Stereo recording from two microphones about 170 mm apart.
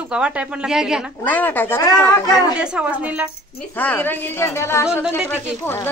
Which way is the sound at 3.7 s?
10° left (ahead or behind).